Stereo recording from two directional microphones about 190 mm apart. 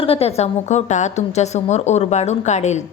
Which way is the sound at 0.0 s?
30° left (ahead or behind).